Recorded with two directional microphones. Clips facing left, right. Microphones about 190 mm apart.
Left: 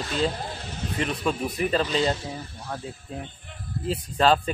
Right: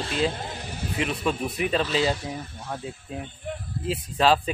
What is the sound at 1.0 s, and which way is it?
A man's voice, centre (ahead or behind).